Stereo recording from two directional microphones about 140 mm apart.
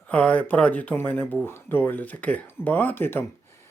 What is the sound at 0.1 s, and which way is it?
Speech, 10° left (ahead or behind).